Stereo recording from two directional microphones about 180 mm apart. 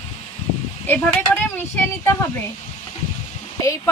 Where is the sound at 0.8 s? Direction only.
10° left (ahead or behind).